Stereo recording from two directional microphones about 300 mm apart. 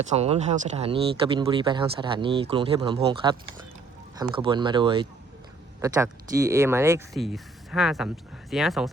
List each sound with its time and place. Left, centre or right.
0.1 s speech: right; by 8.9 s centre